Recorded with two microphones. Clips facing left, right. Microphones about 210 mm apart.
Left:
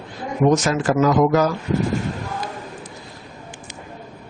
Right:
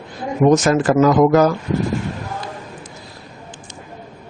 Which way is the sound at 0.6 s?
55° right (ahead or behind).